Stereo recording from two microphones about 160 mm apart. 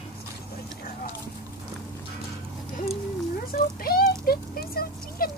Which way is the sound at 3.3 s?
70° left (ahead or behind).